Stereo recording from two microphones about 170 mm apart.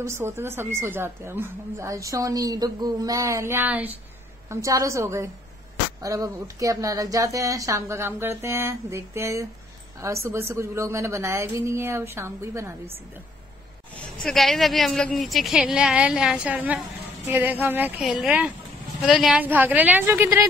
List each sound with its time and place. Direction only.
0.0 s speech: 15° right (ahead or behind)
14.2 s a woman's voice: centre (ahead or behind); by 20.4 s 15° right (ahead or behind)